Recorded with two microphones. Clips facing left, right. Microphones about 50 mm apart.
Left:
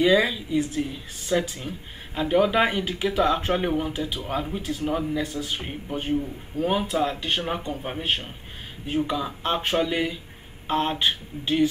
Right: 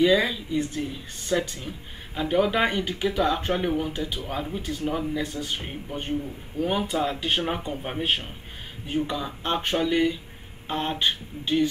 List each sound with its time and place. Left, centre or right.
0.0 s speech: centre
4.4 s speech: centre
6.9 s speech: centre